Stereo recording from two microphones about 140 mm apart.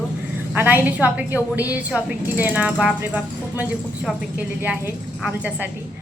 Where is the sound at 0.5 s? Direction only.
10° right (ahead or behind).